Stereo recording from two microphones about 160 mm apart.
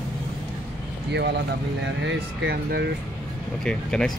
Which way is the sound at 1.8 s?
85° right.